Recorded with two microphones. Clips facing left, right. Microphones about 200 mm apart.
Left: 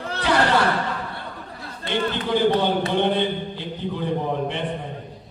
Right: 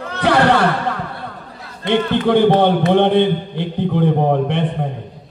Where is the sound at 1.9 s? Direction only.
60° right (ahead or behind).